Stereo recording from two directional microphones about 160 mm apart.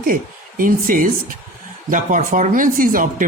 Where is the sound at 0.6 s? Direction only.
60° right (ahead or behind).